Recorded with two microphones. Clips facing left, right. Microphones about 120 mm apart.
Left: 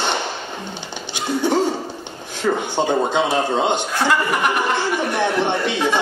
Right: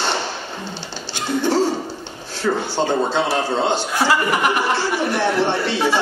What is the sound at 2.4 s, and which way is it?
A man's voice, 15° left (ahead or behind).